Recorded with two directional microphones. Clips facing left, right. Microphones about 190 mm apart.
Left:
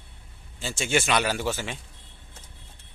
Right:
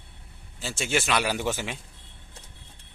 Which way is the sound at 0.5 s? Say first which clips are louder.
Left 2 dB; centre (ahead or behind).